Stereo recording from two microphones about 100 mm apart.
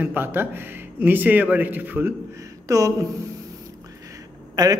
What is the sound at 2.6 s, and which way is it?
Speech, 35° right (ahead or behind).